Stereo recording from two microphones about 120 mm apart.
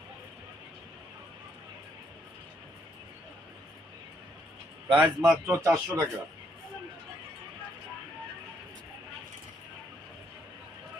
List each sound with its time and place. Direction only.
4.9 s a man's voice: 5° right (ahead or behind)
5.5 s speech: 20° right (ahead or behind)